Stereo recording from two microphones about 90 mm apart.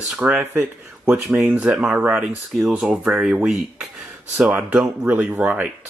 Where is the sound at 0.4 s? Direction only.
25° right (ahead or behind).